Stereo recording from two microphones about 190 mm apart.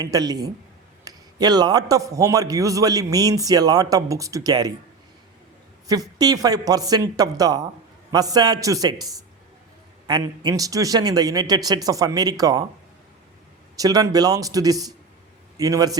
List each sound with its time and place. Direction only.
0.0 s a man's voice: 20° right (ahead or behind)
5.9 s a man's voice: 20° right (ahead or behind)
10.1 s a man's voice: 20° right (ahead or behind)
13.7 s a man's voice: 20° right (ahead or behind)